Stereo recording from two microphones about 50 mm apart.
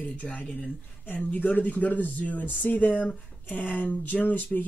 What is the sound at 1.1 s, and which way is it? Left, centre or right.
Speech, left.